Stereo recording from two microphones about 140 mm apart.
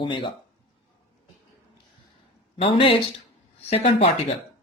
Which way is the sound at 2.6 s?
40° left (ahead or behind).